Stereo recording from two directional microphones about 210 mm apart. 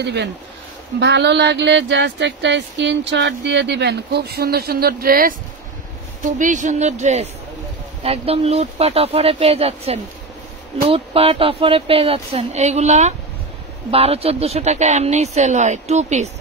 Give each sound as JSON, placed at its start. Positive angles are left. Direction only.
{"t": 0.0, "sound": "a woman's voice", "side_deg": -55}